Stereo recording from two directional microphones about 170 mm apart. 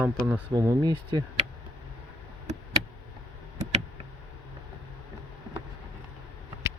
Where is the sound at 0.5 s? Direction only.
20° right (ahead or behind).